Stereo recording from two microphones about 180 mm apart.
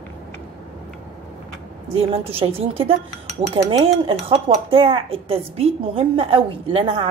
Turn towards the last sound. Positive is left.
turn(degrees=-30)  # may be behind; listen again after turning